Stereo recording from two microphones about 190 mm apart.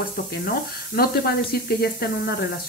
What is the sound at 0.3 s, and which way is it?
Speech, 55° left (ahead or behind).